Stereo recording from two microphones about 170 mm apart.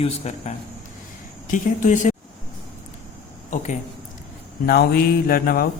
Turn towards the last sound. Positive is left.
turn(degrees=60)  # may be behind; listen again after turning